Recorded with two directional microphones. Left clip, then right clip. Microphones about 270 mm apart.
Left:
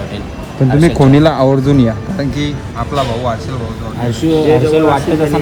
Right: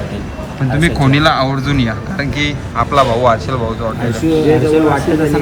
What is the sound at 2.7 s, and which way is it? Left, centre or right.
Speech, centre.